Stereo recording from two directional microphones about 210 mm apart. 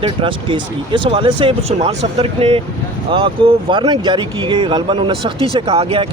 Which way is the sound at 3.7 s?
20° right (ahead or behind).